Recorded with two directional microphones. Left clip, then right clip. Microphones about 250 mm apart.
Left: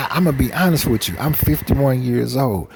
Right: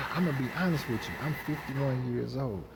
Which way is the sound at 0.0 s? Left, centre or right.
Left.